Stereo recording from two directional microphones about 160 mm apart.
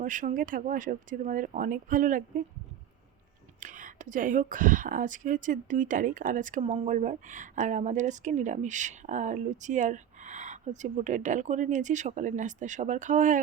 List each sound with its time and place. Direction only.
0.0 s speech: 55° right (ahead or behind)
3.6 s speech: 55° right (ahead or behind)